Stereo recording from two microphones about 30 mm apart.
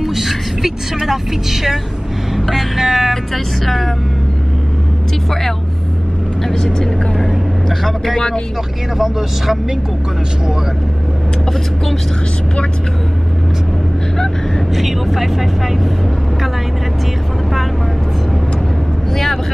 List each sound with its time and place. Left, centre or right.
0.0 s speech: centre
2.8 s speech: centre
3.6 s speech: centre
6.4 s speech: left
8.9 s speech: centre
14.8 s speech: centre